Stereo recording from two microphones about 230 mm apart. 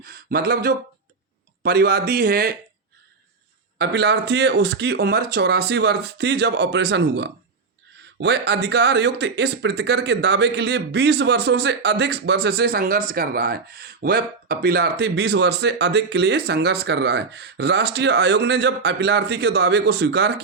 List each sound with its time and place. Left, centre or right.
0.0 s a man's voice: right
3.8 s speech: right